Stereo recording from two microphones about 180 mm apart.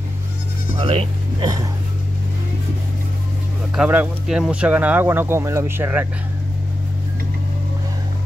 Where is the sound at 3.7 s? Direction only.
10° right (ahead or behind).